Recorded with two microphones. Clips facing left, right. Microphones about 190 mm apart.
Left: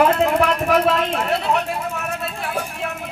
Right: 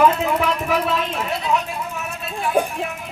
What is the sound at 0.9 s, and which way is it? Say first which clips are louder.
Speech: left 4 dB; 65° left (ahead or behind).